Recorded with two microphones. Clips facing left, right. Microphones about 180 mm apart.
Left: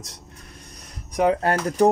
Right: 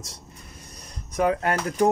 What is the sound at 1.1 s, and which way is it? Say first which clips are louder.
Speech: left 3 dB; 20° left (ahead or behind).